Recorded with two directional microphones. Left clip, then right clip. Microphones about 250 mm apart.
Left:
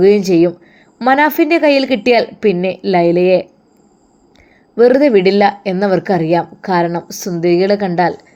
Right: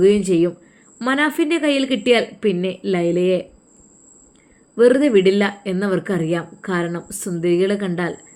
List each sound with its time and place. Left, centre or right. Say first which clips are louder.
0.0 s speech: left 5 dB; centre
4.7 s speech: left 5 dB; centre